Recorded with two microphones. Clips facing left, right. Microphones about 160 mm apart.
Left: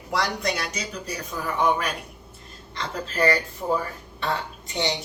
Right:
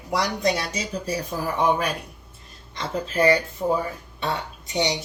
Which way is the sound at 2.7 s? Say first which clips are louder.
Right 3 dB; 20° right (ahead or behind).